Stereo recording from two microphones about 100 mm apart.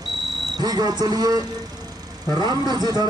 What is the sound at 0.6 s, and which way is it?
A man's voice, 40° right (ahead or behind).